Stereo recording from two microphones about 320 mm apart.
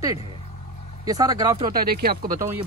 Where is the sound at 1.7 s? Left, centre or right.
Right.